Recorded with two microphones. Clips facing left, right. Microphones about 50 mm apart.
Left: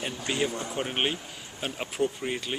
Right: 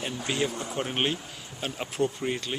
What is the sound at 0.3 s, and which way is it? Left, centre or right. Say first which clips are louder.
Speech: left 1 dB; centre.